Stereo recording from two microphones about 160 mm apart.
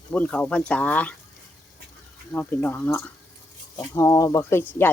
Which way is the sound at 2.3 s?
10° left (ahead or behind).